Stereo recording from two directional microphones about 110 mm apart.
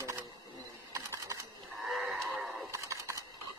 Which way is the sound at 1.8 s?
Centre (ahead or behind).